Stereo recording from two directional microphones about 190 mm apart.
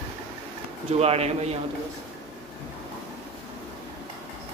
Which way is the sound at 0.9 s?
30° right (ahead or behind).